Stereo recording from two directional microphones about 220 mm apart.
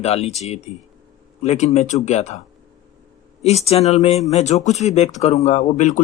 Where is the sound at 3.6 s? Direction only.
30° left (ahead or behind).